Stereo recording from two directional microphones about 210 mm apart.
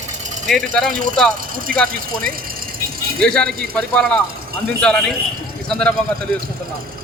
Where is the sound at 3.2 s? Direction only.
5° left (ahead or behind).